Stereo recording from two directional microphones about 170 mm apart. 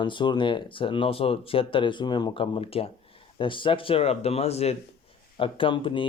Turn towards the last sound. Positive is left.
turn(degrees=30)  # may be behind; listen again after turning